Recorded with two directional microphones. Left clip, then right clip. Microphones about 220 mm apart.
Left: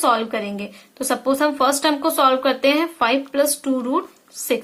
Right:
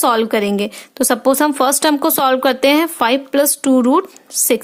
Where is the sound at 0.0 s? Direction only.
50° right (ahead or behind).